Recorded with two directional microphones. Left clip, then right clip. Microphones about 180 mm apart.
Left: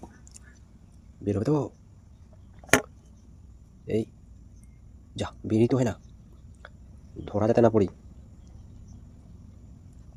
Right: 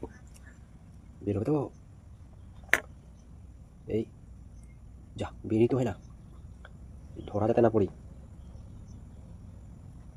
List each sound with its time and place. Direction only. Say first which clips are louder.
1.2 s speech: left 3 dB; 45° left (ahead or behind)
3.8 s speech: left 3 dB; 45° left (ahead or behind)
5.1 s speech: left 3 dB; 45° left (ahead or behind)
7.3 s speech: left 3 dB; 50° left (ahead or behind)